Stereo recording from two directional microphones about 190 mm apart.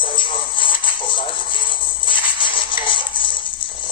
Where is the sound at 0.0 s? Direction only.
25° left (ahead or behind).